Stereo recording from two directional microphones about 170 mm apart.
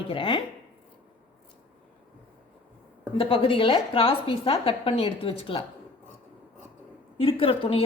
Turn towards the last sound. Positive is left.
turn(degrees=35)  # may be behind; listen again after turning